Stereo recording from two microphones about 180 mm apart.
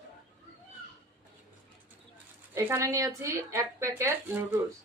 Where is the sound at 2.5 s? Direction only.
15° right (ahead or behind).